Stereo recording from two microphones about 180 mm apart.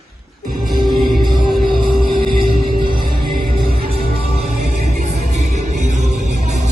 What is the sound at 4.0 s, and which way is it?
Music, 35° right (ahead or behind).